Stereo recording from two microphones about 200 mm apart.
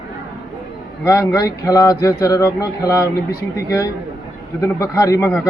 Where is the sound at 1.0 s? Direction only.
15° left (ahead or behind).